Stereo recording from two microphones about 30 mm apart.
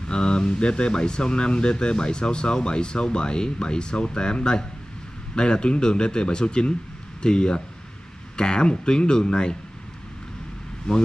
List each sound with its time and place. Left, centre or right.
0.1 s speech: left